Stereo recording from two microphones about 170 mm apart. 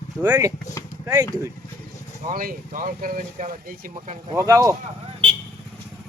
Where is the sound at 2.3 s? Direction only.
55° right (ahead or behind).